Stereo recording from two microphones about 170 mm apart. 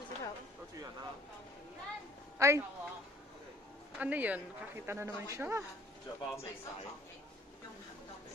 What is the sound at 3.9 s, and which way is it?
A woman's voice, 10° right (ahead or behind).